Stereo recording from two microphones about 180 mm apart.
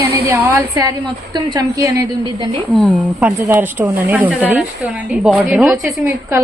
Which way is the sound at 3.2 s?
10° right (ahead or behind).